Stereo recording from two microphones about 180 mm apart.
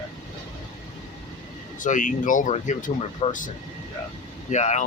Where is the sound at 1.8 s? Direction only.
45° left (ahead or behind).